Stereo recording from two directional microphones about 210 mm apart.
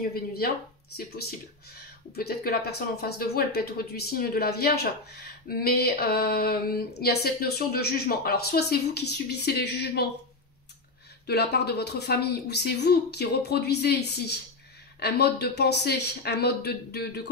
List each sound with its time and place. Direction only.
0.0 s speech: 45° left (ahead or behind)
11.2 s speech: 50° left (ahead or behind)